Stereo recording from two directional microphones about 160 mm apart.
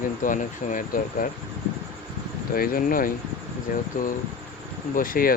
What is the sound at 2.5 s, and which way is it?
Speech, 65° left (ahead or behind).